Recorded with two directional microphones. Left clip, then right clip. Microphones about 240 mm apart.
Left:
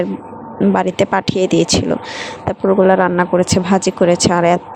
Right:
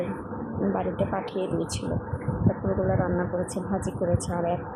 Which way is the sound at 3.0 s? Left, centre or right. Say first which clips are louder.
Left 14 dB; left.